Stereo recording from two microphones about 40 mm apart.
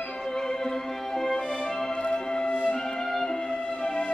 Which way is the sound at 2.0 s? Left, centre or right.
Left.